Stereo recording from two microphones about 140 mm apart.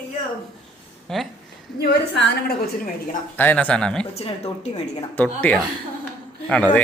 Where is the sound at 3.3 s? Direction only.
15° left (ahead or behind).